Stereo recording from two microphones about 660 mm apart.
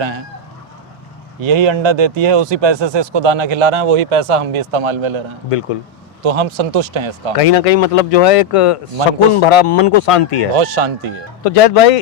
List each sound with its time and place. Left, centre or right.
1.4 s speech: right
6.2 s speech: right
7.3 s speech: left
10.5 s speech: right
11.4 s speech: left